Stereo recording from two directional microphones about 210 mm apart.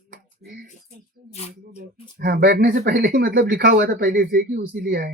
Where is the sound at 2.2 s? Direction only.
45° right (ahead or behind).